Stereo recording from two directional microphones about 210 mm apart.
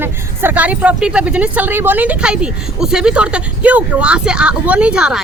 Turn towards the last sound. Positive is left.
turn(degrees=-5)  # may be behind; listen again after turning